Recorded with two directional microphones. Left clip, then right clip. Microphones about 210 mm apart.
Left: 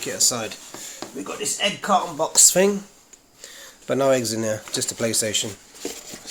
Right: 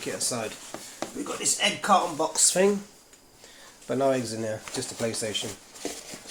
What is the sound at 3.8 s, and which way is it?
Speech, 55° left (ahead or behind).